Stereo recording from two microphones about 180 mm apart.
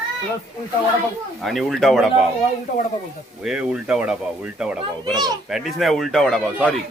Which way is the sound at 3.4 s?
5° right (ahead or behind).